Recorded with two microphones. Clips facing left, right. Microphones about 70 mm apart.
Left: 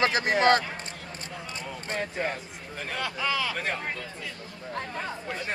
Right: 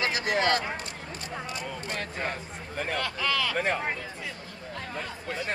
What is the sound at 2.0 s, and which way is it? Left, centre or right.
Speech, centre.